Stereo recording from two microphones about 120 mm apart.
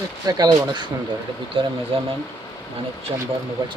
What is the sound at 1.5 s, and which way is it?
Speech, 50° right (ahead or behind).